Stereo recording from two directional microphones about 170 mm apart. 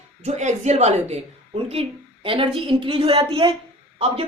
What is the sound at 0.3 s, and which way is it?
A woman's voice, 45° right (ahead or behind).